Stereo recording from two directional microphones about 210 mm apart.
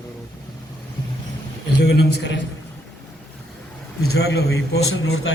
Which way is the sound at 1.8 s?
55° left (ahead or behind).